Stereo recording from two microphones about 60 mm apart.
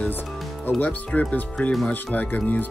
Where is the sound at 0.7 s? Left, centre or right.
Left.